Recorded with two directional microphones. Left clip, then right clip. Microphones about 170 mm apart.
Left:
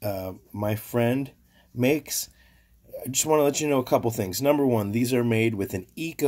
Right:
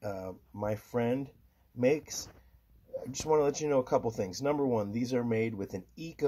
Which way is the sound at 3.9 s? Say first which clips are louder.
Left 6 dB; 25° left (ahead or behind).